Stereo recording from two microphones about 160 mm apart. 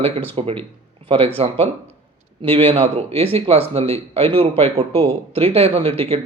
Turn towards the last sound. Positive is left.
turn(degrees=-40)  # may be behind; listen again after turning